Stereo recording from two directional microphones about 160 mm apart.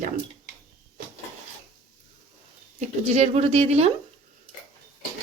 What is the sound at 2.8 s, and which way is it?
Speech, 40° right (ahead or behind).